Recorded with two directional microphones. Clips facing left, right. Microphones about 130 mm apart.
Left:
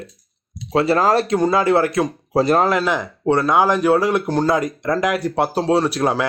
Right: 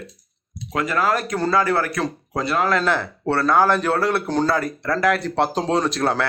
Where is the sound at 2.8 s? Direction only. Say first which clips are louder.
Left 1 dB; 15° left (ahead or behind).